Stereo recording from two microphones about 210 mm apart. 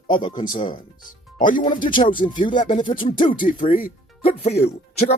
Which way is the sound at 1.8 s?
25° left (ahead or behind).